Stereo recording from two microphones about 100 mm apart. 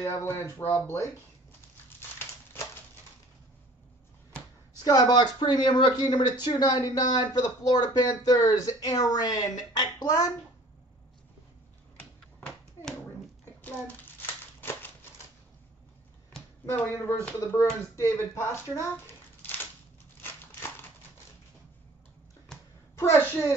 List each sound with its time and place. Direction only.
0.0 s speech: 30° left (ahead or behind)
2.0 s crumpling: 25° left (ahead or behind)
4.8 s a woman's voice: 40° left (ahead or behind)
13.6 s a sound: 20° left (ahead or behind)
17.1 s speech: 20° left (ahead or behind)
22.9 s speech: 25° left (ahead or behind)